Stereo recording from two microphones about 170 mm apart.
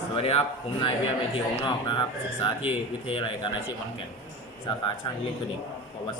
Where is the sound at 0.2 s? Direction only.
35° left (ahead or behind).